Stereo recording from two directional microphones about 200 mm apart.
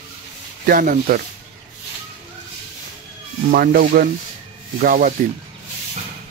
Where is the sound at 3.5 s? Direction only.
45° right (ahead or behind).